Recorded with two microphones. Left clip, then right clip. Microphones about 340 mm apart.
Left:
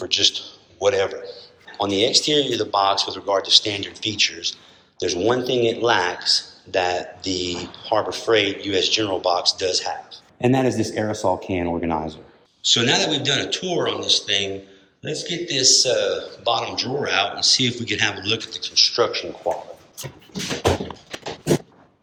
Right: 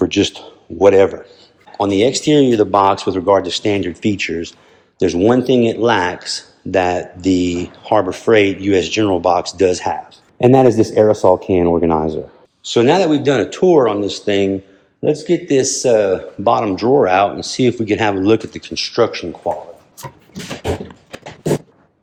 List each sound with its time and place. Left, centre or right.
0.1 s speech: centre
10.4 s speech: centre; by 19.2 s right